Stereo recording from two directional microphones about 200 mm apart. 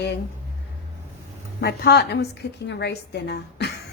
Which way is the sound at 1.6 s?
55° left (ahead or behind).